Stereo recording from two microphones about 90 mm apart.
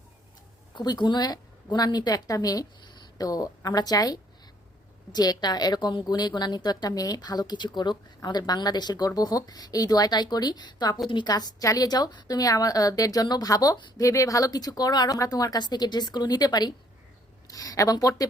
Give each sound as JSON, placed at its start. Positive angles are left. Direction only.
{"t": 0.8, "sound": "a woman's voice", "side_deg": 50}